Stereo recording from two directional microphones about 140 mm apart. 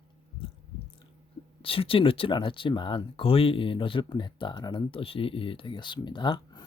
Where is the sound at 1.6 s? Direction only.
40° left (ahead or behind).